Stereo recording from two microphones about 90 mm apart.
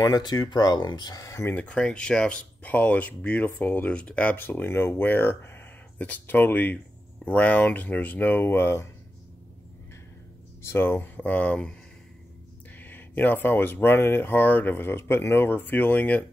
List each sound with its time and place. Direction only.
0.0 s speech: 50° left (ahead or behind); by 1.6 s 30° left (ahead or behind)
1.6 s speech: 15° left (ahead or behind)
10.7 s speech: 25° left (ahead or behind)
12.7 s speech: 20° left (ahead or behind)